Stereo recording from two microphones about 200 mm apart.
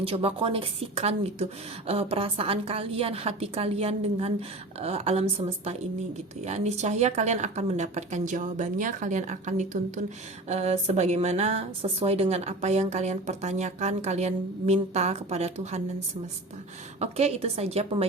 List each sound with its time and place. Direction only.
0.0 s a woman's voice: 30° right (ahead or behind)
6.4 s speech: 35° right (ahead or behind)
17.0 s speech: 30° right (ahead or behind)